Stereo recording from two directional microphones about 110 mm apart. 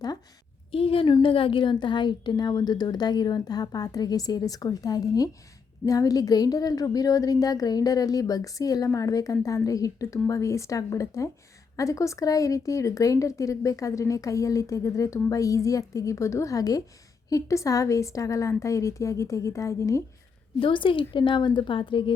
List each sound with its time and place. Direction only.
0.7 s a woman's voice: 60° left (ahead or behind)
1.0 s a woman's voice: 45° left (ahead or behind); by 20.0 s 30° left (ahead or behind)
20.6 s a woman's voice: 50° left (ahead or behind)